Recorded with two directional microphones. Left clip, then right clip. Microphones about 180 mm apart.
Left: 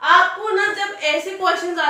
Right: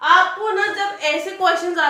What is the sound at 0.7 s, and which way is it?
A woman's voice, 20° right (ahead or behind).